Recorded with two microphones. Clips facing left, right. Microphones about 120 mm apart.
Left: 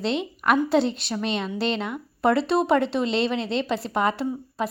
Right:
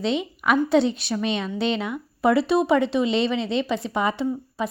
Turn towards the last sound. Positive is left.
turn(degrees=0)  # may be behind; listen again after turning